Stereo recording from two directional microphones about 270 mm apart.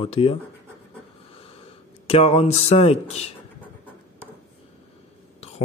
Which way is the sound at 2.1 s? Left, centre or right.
Left.